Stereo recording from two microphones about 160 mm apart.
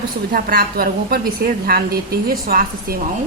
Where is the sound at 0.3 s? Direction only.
65° right (ahead or behind).